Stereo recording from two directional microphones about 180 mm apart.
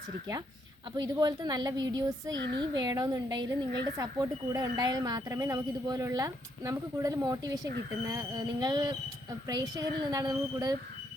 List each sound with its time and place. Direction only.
0.9 s speech: 25° right (ahead or behind)